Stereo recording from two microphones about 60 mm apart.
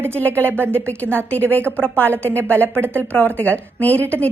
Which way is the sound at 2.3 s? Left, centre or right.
Left.